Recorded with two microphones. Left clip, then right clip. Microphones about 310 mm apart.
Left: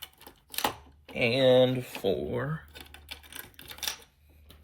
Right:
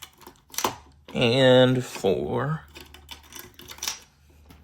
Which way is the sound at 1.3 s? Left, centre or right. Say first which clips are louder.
Right 4 dB; right.